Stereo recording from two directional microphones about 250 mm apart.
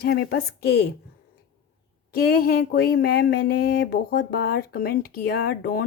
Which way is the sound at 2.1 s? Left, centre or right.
Left.